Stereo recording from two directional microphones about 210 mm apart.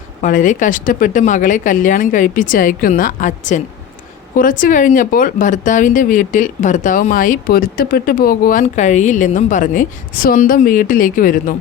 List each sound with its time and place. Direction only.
0.2 s speech: 40° left (ahead or behind)
4.4 s speech: 40° left (ahead or behind)